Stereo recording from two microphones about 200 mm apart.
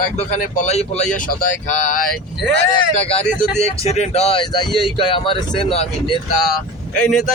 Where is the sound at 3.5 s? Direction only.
35° left (ahead or behind).